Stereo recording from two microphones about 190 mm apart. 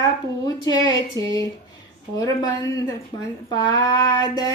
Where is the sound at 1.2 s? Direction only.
20° right (ahead or behind).